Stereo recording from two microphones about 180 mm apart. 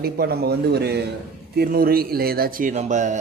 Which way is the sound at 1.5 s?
55° right (ahead or behind).